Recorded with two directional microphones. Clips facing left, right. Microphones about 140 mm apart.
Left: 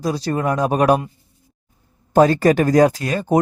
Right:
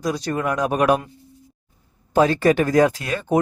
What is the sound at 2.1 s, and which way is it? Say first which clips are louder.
Speech: left 3 dB; 40° left (ahead or behind).